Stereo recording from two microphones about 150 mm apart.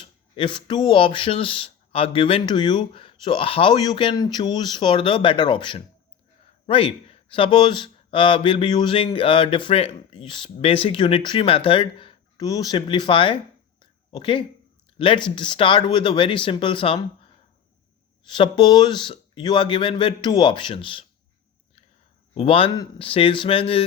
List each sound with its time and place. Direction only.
0.3 s speech: 35° left (ahead or behind)
12.4 s speech: 25° left (ahead or behind)
18.3 s speech: 30° left (ahead or behind)
22.4 s speech: 35° left (ahead or behind)